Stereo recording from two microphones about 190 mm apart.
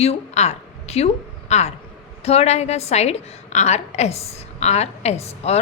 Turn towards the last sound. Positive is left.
turn(degrees=35)  # may be behind; listen again after turning